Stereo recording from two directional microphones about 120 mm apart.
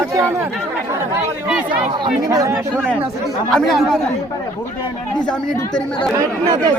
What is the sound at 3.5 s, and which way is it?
Speech, centre (ahead or behind).